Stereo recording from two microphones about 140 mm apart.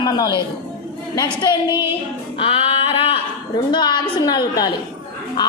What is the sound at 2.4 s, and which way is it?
Singing, 40° left (ahead or behind).